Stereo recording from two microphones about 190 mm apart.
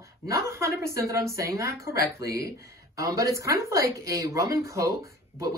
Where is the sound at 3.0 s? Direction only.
15° right (ahead or behind).